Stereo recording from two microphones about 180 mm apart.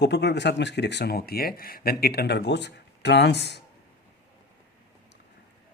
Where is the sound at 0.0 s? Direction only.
70° left (ahead or behind).